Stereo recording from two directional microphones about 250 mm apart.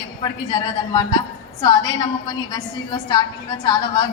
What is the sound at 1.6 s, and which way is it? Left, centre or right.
A woman's voice, centre.